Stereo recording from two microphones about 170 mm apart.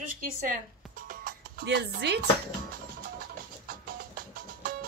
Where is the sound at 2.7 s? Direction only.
60° right (ahead or behind).